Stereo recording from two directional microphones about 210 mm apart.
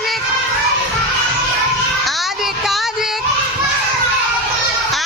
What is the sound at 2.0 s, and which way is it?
Child singing, centre (ahead or behind).